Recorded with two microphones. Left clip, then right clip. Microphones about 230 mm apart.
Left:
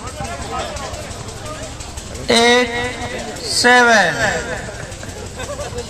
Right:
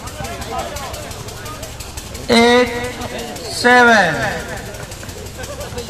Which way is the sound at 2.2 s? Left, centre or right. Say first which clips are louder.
Right 1 dB; left.